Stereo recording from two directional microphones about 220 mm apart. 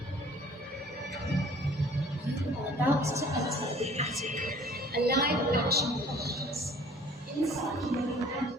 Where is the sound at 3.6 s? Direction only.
30° right (ahead or behind); by 5.7 s 45° right (ahead or behind).